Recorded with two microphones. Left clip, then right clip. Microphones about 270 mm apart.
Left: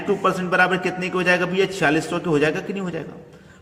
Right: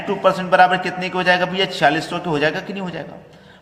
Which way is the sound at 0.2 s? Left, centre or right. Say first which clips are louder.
Right 7 dB; centre.